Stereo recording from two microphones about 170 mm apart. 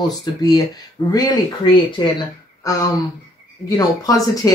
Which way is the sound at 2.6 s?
20° left (ahead or behind).